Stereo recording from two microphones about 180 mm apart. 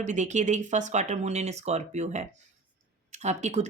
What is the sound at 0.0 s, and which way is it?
Speech, 40° right (ahead or behind).